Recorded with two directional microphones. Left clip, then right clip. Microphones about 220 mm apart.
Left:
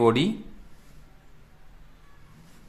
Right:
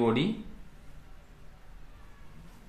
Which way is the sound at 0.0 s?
45° left (ahead or behind).